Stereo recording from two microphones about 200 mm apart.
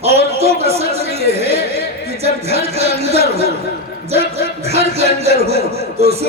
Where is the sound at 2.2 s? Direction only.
30° right (ahead or behind).